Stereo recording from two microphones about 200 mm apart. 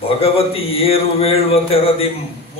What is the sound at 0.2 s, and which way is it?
Speech, 30° left (ahead or behind).